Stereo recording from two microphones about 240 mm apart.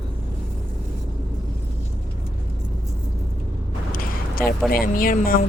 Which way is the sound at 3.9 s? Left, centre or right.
Left.